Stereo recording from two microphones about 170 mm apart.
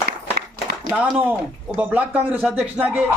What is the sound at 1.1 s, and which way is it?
A man's voice, 10° right (ahead or behind).